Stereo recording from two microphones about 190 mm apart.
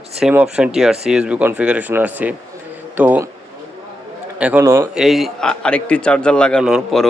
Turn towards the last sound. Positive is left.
turn(degrees=0)  # may be behind; listen again after turning